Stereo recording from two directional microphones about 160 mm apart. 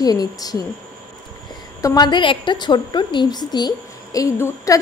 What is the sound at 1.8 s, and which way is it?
A woman's voice, 25° left (ahead or behind).